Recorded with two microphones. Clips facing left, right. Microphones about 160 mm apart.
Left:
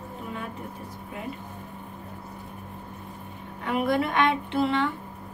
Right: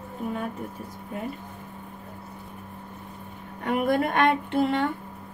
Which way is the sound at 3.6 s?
50° right (ahead or behind).